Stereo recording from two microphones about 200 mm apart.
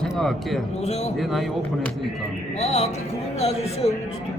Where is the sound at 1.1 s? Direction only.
Centre (ahead or behind).